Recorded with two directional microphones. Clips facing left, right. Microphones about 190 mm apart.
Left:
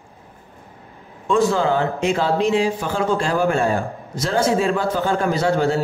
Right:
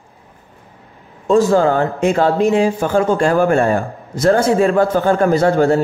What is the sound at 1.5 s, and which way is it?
A man's voice, 50° right (ahead or behind).